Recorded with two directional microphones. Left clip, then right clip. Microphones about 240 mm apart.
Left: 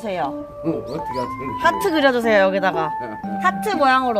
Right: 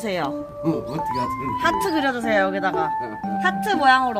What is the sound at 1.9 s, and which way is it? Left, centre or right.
A woman's voice, left.